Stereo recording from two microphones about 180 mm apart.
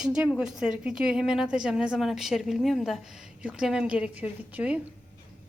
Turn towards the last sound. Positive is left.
turn(degrees=-10)  # may be behind; listen again after turning